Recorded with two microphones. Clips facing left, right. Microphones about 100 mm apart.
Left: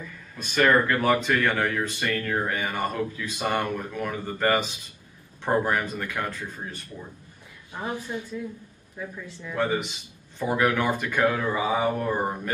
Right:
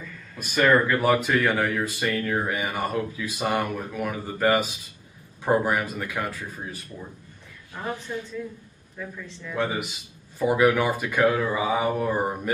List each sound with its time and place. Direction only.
0.4 s speech: 10° right (ahead or behind)
8.1 s speech: 15° left (ahead or behind)
10.4 s speech: 10° right (ahead or behind)